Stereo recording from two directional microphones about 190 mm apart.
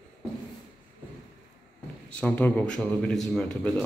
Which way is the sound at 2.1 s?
10° left (ahead or behind).